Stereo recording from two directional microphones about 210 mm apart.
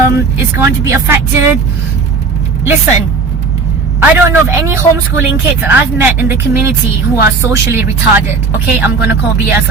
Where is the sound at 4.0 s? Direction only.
10° right (ahead or behind).